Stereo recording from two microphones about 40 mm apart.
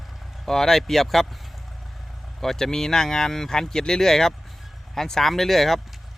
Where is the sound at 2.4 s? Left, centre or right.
Centre.